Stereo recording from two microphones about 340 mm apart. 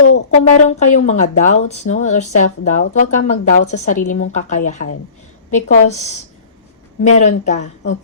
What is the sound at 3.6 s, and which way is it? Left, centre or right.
Speech, left.